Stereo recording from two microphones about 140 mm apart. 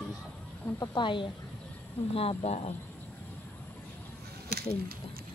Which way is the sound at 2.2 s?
45° left (ahead or behind).